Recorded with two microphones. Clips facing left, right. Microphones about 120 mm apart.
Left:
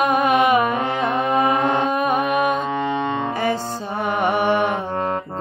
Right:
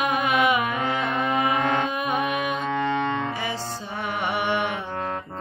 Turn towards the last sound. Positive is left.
turn(degrees=45)  # may be behind; listen again after turning